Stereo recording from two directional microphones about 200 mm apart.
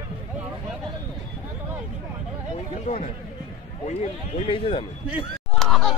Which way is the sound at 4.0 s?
30° left (ahead or behind).